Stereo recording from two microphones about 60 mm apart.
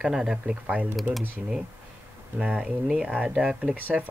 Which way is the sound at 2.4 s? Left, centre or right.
Centre.